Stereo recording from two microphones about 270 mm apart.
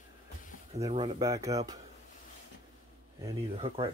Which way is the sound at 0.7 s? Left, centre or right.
Centre.